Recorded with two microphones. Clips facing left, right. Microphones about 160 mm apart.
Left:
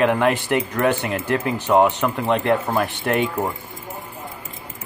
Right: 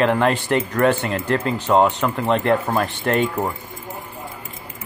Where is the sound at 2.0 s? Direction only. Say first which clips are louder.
Right 1 dB; 15° left (ahead or behind).